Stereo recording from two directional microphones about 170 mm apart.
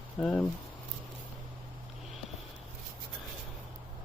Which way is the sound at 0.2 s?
5° left (ahead or behind).